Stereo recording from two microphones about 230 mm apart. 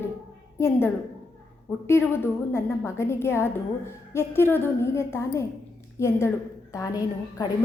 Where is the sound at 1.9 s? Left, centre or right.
Centre.